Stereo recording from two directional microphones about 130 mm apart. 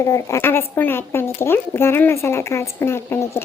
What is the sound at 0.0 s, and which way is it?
Speech, 25° left (ahead or behind).